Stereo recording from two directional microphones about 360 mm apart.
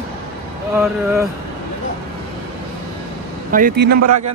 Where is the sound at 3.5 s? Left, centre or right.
Right.